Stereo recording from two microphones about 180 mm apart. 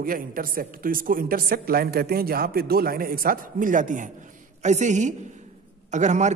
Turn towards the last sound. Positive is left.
turn(degrees=-40)  # may be behind; listen again after turning